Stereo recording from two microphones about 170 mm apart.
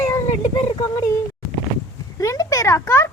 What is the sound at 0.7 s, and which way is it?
Speech, 20° left (ahead or behind).